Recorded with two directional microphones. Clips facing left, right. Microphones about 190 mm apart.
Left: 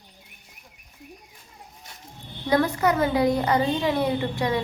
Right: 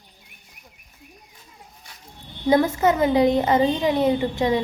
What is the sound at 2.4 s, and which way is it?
A woman's voice, 25° right (ahead or behind).